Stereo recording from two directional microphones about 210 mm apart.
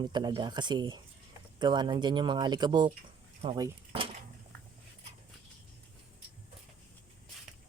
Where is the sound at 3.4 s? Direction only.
25° right (ahead or behind).